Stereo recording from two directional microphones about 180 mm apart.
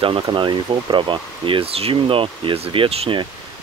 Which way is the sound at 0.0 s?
30° right (ahead or behind).